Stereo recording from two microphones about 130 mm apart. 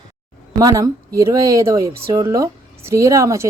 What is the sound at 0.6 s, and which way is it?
A woman's voice, 25° right (ahead or behind).